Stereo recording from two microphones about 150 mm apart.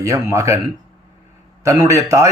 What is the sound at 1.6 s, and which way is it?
Speech, 20° right (ahead or behind).